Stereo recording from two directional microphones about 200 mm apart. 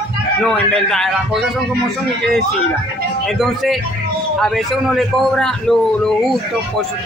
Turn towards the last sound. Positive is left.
turn(degrees=5)  # may be behind; listen again after turning